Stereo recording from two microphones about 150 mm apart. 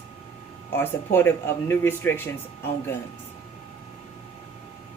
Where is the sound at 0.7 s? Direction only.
15° left (ahead or behind).